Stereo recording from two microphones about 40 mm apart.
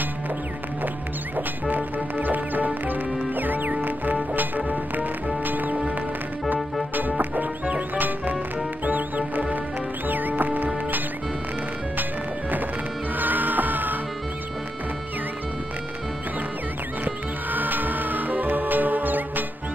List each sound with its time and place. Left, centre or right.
1.3 s music: right
12.0 s music: right
17.0 s music: right